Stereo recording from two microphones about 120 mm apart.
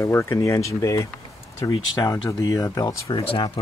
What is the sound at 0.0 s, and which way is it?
Speech, 20° left (ahead or behind).